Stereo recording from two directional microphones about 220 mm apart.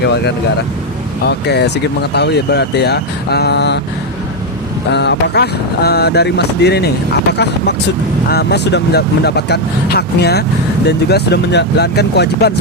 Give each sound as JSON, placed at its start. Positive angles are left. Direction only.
{"t": 0.0, "sound": "speech", "side_deg": 50}
{"t": 4.9, "sound": "speech", "side_deg": 50}